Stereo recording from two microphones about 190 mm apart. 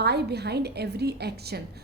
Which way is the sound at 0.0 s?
60° right (ahead or behind).